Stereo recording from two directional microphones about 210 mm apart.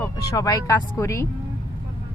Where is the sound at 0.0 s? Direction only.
15° left (ahead or behind).